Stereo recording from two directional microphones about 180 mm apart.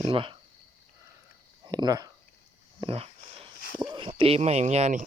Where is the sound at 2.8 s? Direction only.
35° right (ahead or behind).